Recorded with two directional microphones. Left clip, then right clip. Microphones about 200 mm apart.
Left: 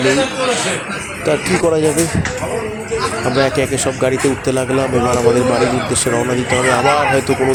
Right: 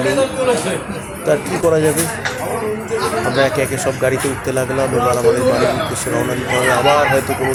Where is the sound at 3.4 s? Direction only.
25° left (ahead or behind).